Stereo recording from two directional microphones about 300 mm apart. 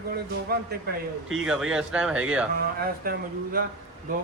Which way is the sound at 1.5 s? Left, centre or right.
Centre.